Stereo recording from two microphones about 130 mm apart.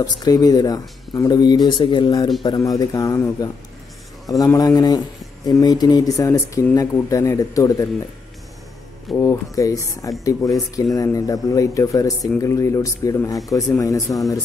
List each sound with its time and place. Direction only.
0.0 s speech: 30° left (ahead or behind)
9.1 s speech: 25° left (ahead or behind)